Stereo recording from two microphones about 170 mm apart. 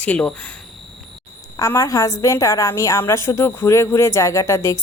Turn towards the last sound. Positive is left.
turn(degrees=15)  # may be behind; listen again after turning